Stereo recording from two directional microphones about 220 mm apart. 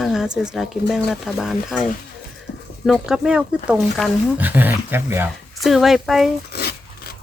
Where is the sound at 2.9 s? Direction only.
Centre (ahead or behind).